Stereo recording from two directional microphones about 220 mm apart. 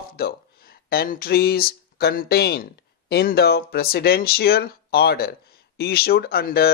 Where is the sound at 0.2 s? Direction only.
45° left (ahead or behind).